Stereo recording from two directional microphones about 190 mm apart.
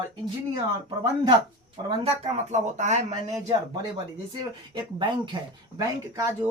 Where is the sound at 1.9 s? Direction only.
35° right (ahead or behind).